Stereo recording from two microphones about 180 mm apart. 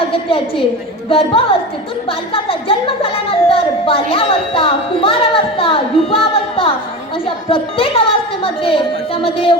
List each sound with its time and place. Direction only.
0.3 s a woman's voice: 30° left (ahead or behind)